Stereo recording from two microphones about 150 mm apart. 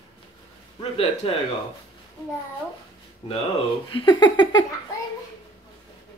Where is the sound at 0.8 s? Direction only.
40° left (ahead or behind).